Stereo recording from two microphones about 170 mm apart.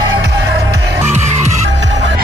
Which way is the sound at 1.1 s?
40° right (ahead or behind).